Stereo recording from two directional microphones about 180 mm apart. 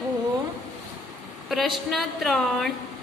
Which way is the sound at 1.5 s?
Centre (ahead or behind).